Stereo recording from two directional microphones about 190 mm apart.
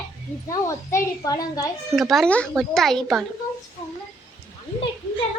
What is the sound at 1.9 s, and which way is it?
A woman's voice, centre (ahead or behind).